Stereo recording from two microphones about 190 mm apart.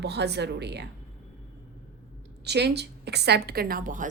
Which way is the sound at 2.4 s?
60° right (ahead or behind).